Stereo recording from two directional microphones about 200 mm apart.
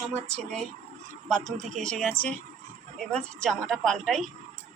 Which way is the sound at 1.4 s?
40° right (ahead or behind).